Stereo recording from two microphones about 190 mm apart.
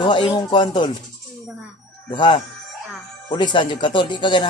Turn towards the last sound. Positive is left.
turn(degrees=25)  # may be behind; listen again after turning